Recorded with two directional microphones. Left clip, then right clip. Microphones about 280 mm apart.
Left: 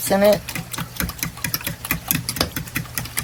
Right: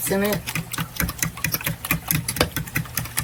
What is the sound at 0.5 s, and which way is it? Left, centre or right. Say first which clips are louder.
Sewing machine: right 1 dB; centre.